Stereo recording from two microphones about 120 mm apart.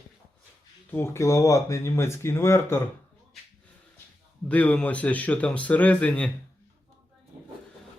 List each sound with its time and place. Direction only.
0.9 s speech: 20° left (ahead or behind)
4.4 s speech: 10° left (ahead or behind)